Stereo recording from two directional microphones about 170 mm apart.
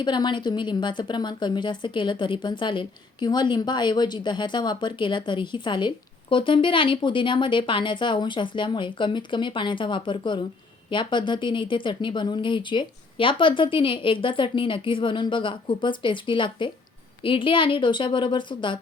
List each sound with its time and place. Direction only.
0.0 s a woman's voice: 25° left (ahead or behind)